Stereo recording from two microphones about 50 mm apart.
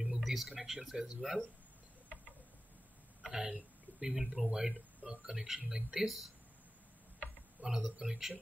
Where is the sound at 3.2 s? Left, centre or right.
Centre.